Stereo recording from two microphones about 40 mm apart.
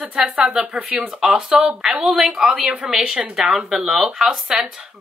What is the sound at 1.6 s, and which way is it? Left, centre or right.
Speech, centre.